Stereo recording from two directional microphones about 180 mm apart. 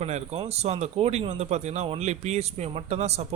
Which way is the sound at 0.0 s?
40° right (ahead or behind).